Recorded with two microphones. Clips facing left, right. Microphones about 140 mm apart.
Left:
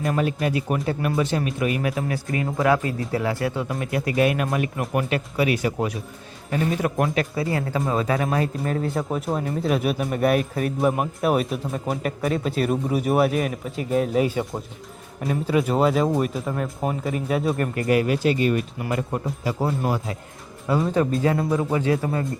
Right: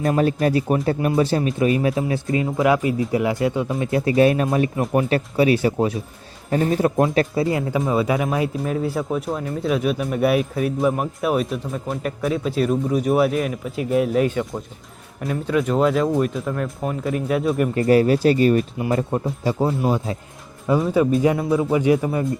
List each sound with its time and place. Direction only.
0.2 s a man's voice: 40° right (ahead or behind)
6.5 s speech: 40° right (ahead or behind)
7.0 s a man's voice: 25° right (ahead or behind)
7.8 s speech: centre (ahead or behind)
17.7 s speech: 35° right (ahead or behind)
19.5 s speech: 10° right (ahead or behind)
21.1 s speech: 15° right (ahead or behind)